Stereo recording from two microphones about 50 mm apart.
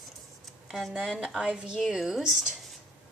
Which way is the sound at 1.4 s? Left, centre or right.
Centre.